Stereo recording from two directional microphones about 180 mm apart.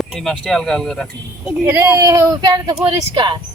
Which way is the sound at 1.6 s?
10° right (ahead or behind).